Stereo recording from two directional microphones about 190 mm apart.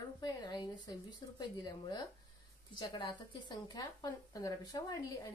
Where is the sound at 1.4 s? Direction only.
20° left (ahead or behind).